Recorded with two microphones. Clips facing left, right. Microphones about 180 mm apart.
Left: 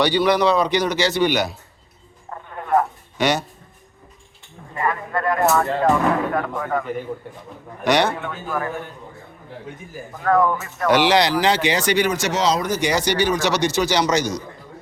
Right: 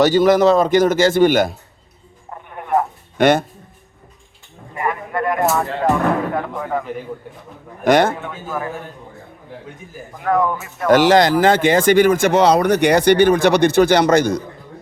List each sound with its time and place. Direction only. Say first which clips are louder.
0.0 s speech: right 5 dB; 45° right (ahead or behind)
2.3 s a sound: even; 15° right (ahead or behind)
3.2 s speech: right 7 dB; 55° right (ahead or behind)
4.7 s speech: right 1 dB; 20° right (ahead or behind)
5.6 s speech: even; centre (ahead or behind)
6.6 s speech: right 1 dB; 15° right (ahead or behind)
7.9 s speech: right 4 dB; 50° right (ahead or behind)
8.2 s speech: even; 10° right (ahead or behind)
10.2 s speech: even; 15° right (ahead or behind)
10.8 s speech: right 5 dB; 45° right (ahead or behind)